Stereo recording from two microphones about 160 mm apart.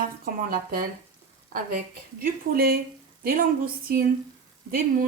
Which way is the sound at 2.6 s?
70° right (ahead or behind).